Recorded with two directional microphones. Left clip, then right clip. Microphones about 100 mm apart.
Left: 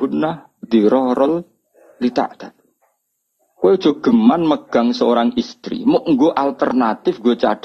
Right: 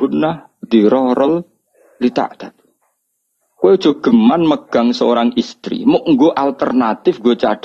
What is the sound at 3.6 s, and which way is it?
A man's voice, 20° right (ahead or behind).